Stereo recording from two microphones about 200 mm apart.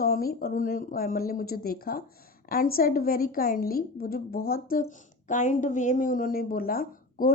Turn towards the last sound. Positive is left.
turn(degrees=45)  # may be behind; listen again after turning